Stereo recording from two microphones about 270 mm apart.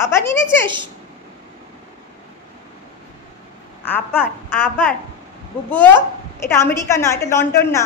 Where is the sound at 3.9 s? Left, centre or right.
Centre.